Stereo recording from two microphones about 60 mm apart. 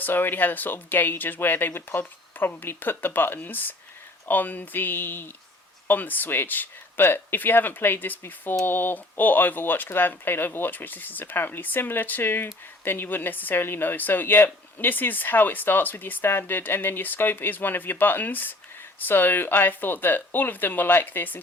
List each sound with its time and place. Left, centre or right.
0.0 s a woman's voice: left